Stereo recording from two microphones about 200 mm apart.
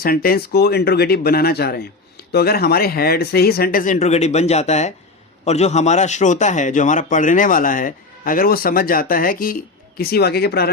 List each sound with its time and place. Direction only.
0.0 s a man's voice: 45° left (ahead or behind)